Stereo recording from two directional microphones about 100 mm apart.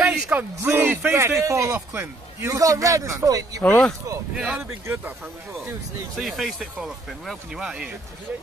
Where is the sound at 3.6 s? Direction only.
15° left (ahead or behind).